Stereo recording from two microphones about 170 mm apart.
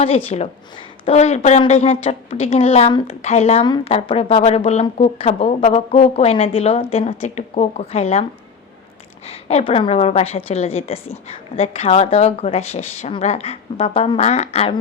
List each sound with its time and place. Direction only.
0.3 s speech: 35° left (ahead or behind)
9.2 s speech: 35° left (ahead or behind)